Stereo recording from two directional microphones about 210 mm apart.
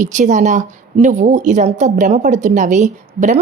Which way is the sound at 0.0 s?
35° right (ahead or behind).